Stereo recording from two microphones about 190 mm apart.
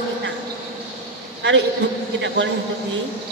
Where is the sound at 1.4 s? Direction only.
65° right (ahead or behind).